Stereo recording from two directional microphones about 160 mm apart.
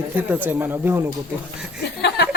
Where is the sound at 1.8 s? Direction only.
90° left.